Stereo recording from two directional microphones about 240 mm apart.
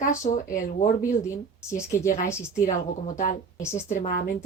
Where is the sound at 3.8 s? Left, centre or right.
Left.